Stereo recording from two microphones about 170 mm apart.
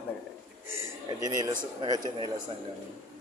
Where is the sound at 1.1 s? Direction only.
20° right (ahead or behind).